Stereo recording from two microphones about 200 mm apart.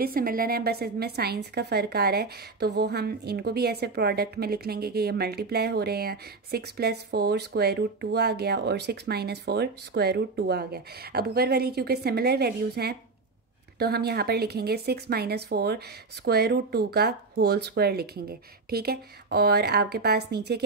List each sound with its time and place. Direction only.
0.0 s a woman's voice: 45° right (ahead or behind)